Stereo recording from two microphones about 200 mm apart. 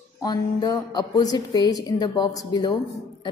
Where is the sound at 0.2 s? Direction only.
20° left (ahead or behind).